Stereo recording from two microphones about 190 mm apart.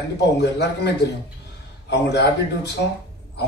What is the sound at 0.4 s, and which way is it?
A man's voice, 60° left (ahead or behind).